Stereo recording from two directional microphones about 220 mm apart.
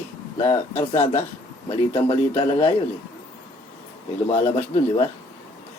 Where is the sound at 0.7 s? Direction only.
30° left (ahead or behind).